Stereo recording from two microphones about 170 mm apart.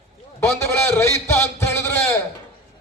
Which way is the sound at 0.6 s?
15° left (ahead or behind).